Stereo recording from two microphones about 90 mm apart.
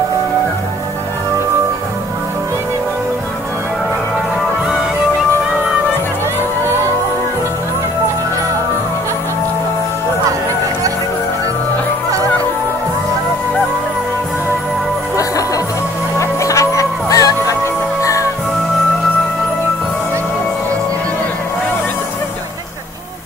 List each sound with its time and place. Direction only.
15.1 s music: 40° left (ahead or behind)